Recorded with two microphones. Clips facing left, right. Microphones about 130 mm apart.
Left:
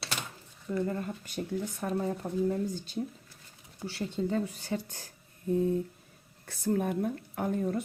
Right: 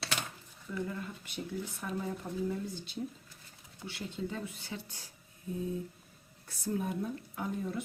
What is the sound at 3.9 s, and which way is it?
Speech, 40° left (ahead or behind).